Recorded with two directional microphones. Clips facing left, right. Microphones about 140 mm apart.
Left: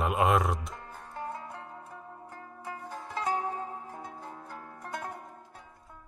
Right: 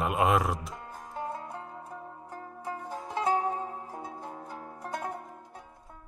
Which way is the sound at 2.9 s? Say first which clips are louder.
Right 4 dB; 15° right (ahead or behind).